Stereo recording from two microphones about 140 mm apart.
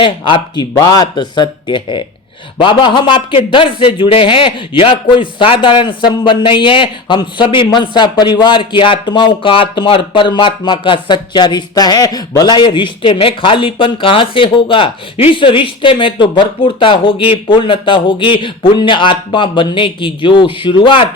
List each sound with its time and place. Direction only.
0.0 s speech: 35° left (ahead or behind)